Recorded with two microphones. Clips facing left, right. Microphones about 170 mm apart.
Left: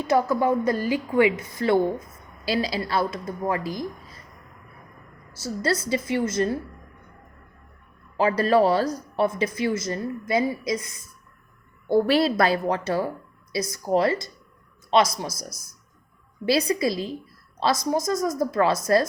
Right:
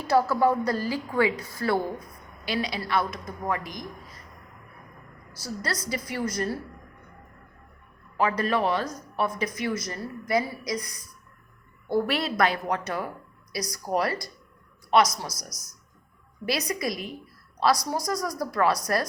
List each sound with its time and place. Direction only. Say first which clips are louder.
0.0 s speech: left 1 dB; 20° left (ahead or behind)
2.4 s a woman's voice: left 4 dB; 35° left (ahead or behind)
5.3 s speech: left 7 dB; 25° left (ahead or behind)
8.1 s a woman's voice: left 5 dB; 30° left (ahead or behind)